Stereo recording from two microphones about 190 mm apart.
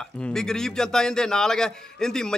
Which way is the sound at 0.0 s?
5° left (ahead or behind).